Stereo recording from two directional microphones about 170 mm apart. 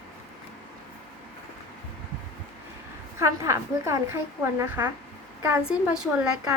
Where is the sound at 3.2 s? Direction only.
15° right (ahead or behind).